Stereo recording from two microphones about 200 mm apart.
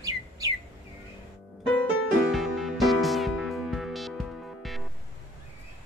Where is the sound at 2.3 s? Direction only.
Centre (ahead or behind).